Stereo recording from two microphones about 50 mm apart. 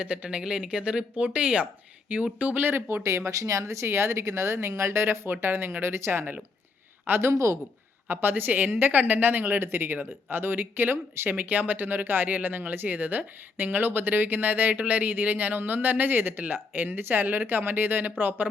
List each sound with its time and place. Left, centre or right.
0.0 s speech: right
2.9 s speech: right
3.8 s speech: right
5.3 s a woman's voice: right
7.1 s speech: right
7.3 s speech: right
8.0 s a woman's voice: right
10.9 s speech: right
11.3 s a woman's voice: right